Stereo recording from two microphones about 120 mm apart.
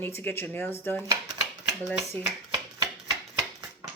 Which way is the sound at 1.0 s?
30° right (ahead or behind).